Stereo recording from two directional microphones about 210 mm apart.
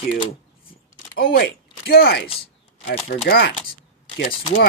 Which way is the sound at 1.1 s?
45° left (ahead or behind).